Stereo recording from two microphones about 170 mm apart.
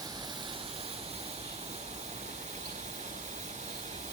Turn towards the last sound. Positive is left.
turn(degrees=-45)  # may be behind; listen again after turning